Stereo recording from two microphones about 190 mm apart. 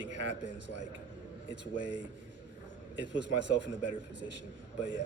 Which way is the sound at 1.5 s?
75° right (ahead or behind).